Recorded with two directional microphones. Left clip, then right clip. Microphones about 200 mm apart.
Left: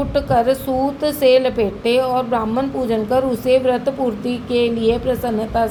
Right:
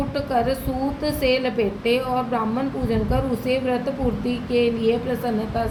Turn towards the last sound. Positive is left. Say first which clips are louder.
# left 5 dB
turn(degrees=35)  # may be behind; listen again after turning